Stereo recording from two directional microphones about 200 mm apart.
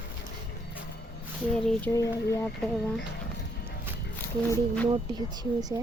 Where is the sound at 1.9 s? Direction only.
15° left (ahead or behind).